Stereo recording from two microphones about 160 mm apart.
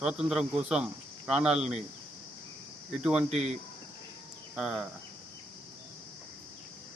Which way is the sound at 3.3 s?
40° right (ahead or behind).